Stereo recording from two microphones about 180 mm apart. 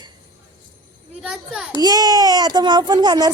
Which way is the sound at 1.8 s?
20° right (ahead or behind).